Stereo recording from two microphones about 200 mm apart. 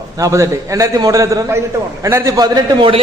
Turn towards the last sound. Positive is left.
turn(degrees=-25)  # may be behind; listen again after turning